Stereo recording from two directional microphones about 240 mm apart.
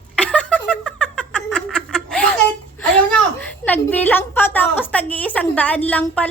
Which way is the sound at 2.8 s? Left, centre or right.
Centre.